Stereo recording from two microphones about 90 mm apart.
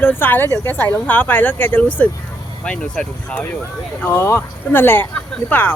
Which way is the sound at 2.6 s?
10° left (ahead or behind).